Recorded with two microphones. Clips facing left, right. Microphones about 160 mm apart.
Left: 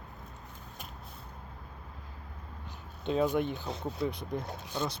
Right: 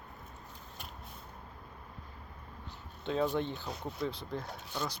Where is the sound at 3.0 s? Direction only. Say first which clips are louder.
Left 3 dB; 15° left (ahead or behind).